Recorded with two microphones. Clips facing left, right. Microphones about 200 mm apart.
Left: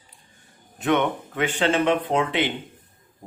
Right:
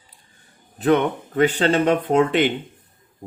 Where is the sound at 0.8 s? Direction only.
35° right (ahead or behind).